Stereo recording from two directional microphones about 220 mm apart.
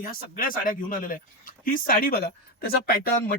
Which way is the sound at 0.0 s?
40° left (ahead or behind).